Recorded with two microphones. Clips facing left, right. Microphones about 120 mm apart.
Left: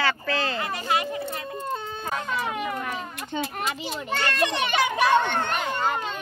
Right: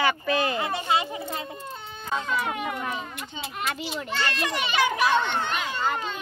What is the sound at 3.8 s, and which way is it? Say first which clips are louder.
A child's voice: left 2 dB; 50° left (ahead or behind).